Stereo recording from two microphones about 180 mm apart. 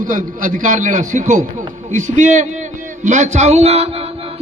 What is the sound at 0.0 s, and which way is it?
A man's voice, 50° right (ahead or behind).